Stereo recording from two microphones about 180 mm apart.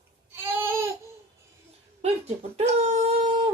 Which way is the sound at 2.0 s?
35° right (ahead or behind).